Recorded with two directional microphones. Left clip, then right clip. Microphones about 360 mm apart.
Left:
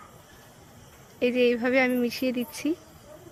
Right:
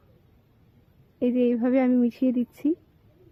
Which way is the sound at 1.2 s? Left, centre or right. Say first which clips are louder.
Left 1 dB; right.